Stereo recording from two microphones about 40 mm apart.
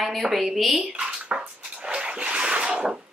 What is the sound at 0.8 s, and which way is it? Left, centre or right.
Bathtub, right.